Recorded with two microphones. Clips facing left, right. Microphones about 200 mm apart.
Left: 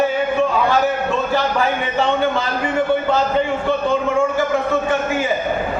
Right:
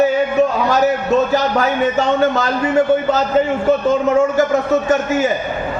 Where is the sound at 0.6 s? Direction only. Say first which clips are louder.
Right 3 dB; 40° right (ahead or behind).